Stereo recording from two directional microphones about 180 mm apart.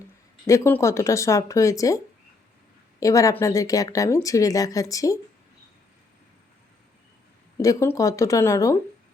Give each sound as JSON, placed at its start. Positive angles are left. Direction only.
{"t": 0.4, "sound": "speech", "side_deg": 15}
{"t": 3.0, "sound": "a woman's voice", "side_deg": 20}
{"t": 7.6, "sound": "speech", "side_deg": 15}